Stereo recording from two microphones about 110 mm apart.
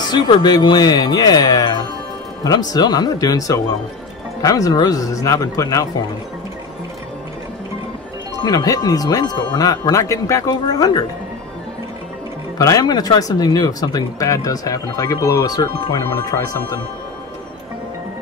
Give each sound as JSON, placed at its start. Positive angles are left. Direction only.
{"t": 0.0, "sound": "speech", "side_deg": 40}
{"t": 8.4, "sound": "speech", "side_deg": 35}
{"t": 12.5, "sound": "speech", "side_deg": 30}